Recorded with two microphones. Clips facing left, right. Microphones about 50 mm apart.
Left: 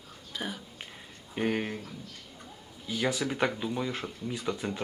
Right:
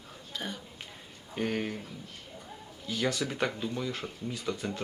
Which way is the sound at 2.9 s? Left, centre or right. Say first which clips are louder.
Left 1 dB; centre.